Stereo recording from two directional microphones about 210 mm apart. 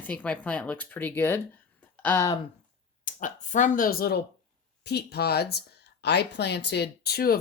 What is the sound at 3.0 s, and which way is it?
Speech, 35° left (ahead or behind).